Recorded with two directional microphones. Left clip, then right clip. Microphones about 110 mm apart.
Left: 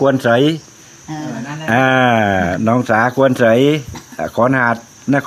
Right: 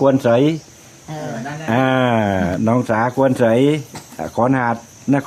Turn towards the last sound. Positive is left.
turn(degrees=-5)  # may be behind; listen again after turning